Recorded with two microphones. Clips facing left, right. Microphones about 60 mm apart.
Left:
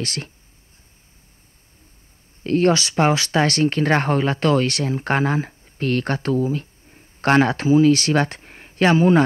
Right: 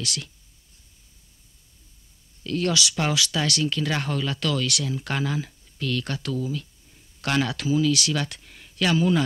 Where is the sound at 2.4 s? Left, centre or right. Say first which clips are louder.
Left 7 dB; left.